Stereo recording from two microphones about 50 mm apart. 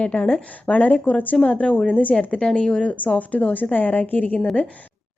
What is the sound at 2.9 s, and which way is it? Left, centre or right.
A woman's voice, left.